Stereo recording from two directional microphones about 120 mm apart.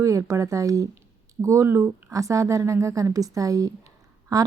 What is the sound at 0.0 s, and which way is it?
Speech, 25° right (ahead or behind).